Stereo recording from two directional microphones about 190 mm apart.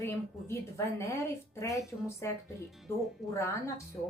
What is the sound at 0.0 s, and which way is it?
Speech, 15° left (ahead or behind).